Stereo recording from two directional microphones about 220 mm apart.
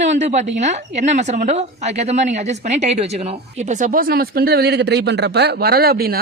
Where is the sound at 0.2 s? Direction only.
30° right (ahead or behind).